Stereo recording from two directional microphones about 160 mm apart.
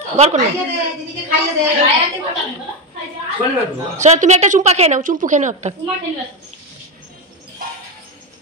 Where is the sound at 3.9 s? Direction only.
45° right (ahead or behind).